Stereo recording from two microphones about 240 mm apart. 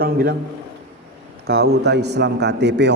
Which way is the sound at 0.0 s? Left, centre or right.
Right.